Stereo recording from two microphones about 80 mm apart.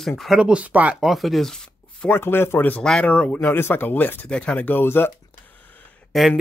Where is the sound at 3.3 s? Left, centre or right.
Left.